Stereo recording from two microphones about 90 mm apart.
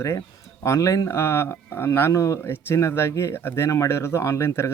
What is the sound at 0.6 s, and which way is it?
Speech, 35° left (ahead or behind).